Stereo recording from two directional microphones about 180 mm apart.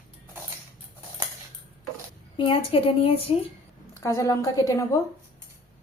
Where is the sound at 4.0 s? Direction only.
15° left (ahead or behind).